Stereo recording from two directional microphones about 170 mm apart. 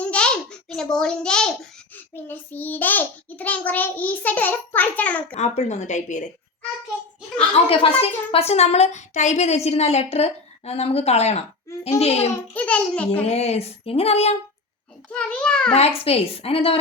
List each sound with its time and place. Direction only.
0.0 s babbling: 5° left (ahead or behind)
2.1 s a child's voice: 10° left (ahead or behind)
5.3 s speech: 40° left (ahead or behind)
7.3 s a woman's voice: 35° left (ahead or behind)
12.5 s a child's voice: 5° left (ahead or behind)
13.2 s a woman's voice: 40° left (ahead or behind)
15.1 s a child's voice: 5° left (ahead or behind)
16.0 s a woman's voice: 35° left (ahead or behind)